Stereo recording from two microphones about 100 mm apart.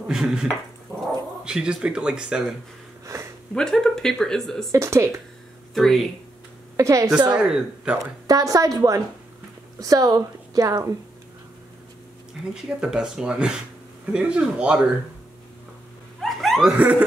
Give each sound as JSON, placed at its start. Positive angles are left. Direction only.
{"t": 0.1, "sound": "speech", "side_deg": -5}
{"t": 3.1, "sound": "sniff", "side_deg": -30}
{"t": 3.5, "sound": "speech", "side_deg": 5}
{"t": 4.7, "sound": "speech", "side_deg": -30}
{"t": 5.8, "sound": "speech", "side_deg": 0}
{"t": 6.8, "sound": "a woman's voice", "side_deg": -35}
{"t": 7.2, "sound": "speech", "side_deg": -10}
{"t": 8.3, "sound": "a woman's voice", "side_deg": -35}
{"t": 12.6, "sound": "speech", "side_deg": -5}
{"t": 16.2, "sound": "a sound", "side_deg": 0}
{"t": 16.7, "sound": "speech", "side_deg": -15}